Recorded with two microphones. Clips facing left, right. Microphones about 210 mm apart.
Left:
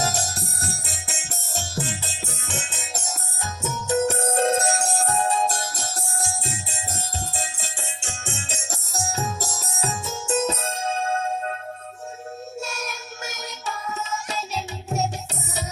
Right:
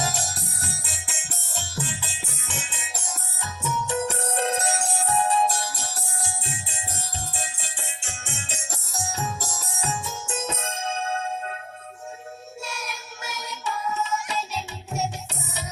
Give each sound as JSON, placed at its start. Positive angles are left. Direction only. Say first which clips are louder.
{"t": 0.0, "sound": "music", "louder": "left 3 dB", "side_deg": 45}
{"t": 12.6, "sound": "music", "louder": "left 3 dB", "side_deg": 45}